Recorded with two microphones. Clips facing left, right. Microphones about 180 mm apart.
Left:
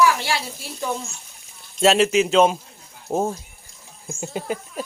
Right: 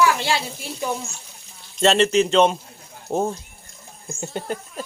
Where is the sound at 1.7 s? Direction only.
5° left (ahead or behind).